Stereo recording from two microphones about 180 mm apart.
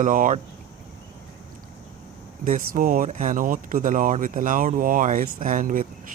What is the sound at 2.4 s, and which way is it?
Speech, 50° right (ahead or behind).